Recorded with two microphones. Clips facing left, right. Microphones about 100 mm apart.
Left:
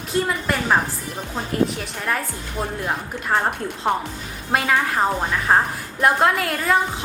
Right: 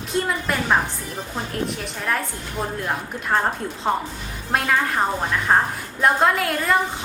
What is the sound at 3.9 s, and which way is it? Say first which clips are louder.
Speech: even; 70° left (ahead or behind).